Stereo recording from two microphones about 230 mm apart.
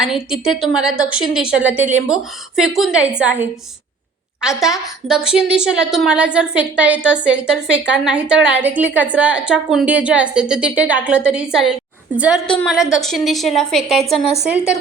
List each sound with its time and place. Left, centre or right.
0.0 s a woman's voice: centre